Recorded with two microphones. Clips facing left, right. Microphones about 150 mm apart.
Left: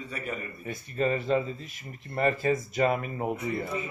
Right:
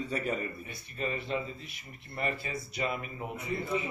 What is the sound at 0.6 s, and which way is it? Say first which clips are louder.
Speech: left 8 dB; 40° left (ahead or behind).